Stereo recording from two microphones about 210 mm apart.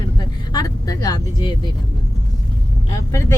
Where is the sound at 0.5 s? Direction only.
20° left (ahead or behind).